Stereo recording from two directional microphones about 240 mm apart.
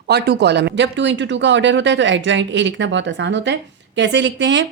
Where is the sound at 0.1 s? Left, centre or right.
Right.